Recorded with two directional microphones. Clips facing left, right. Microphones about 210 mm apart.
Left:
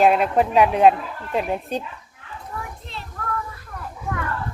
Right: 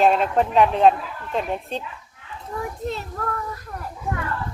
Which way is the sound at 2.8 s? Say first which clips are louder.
Right 12 dB; 45° right (ahead or behind).